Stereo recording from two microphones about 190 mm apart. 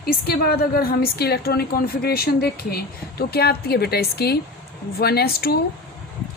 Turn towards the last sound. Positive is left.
turn(degrees=55)  # may be behind; listen again after turning